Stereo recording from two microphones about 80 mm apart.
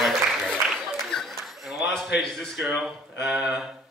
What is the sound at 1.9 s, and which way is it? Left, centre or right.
Speech, centre.